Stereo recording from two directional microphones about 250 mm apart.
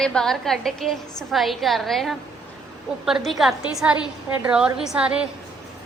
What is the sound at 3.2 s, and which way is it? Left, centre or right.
A woman's voice, centre.